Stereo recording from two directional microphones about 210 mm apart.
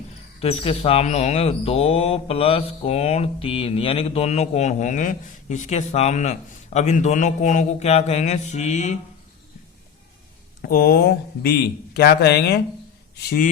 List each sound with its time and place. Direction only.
0.4 s a man's voice: 30° left (ahead or behind)
10.6 s speech: 45° left (ahead or behind)